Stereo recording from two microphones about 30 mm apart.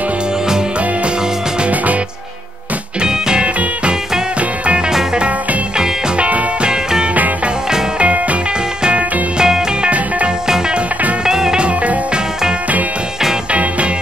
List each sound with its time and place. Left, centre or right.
3.1 s music: right
3.4 s music: right
6.1 s music: right
6.6 s music: right
8.0 s music: right
9.4 s music: right
9.8 s music: right
11.2 s music: centre
13.5 s music: right